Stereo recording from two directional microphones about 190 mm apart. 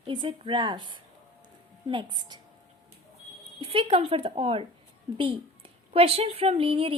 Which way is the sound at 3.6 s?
30° right (ahead or behind).